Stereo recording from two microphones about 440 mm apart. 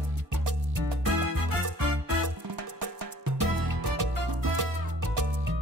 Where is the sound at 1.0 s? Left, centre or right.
Right.